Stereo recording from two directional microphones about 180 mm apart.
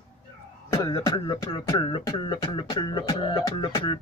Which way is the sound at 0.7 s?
20° left (ahead or behind).